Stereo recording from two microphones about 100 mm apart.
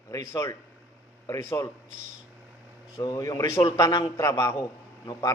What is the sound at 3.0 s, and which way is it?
A man's voice, 35° left (ahead or behind).